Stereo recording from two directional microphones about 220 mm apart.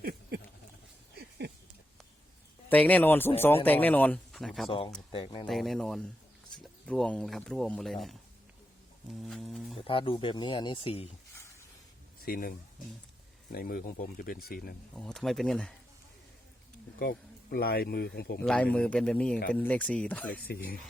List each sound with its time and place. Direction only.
0.0 s a sound: 45° right (ahead or behind)
2.6 s speech: 5° left (ahead or behind)
5.1 s speech: 25° left (ahead or behind)
5.5 s speech: centre (ahead or behind)
9.2 s speech: centre (ahead or behind)
9.8 s speech: 25° left (ahead or behind)
12.2 s speech: 40° left (ahead or behind)
14.9 s speech: centre (ahead or behind)
17.0 s speech: 45° left (ahead or behind)
18.3 s speech: 5° left (ahead or behind)
20.3 s speech: 40° left (ahead or behind)